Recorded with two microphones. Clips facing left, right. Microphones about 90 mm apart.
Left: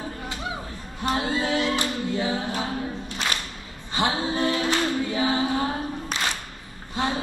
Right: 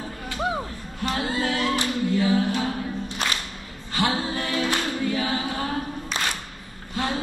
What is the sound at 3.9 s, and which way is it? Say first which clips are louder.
A capella: even; 20° left (ahead or behind).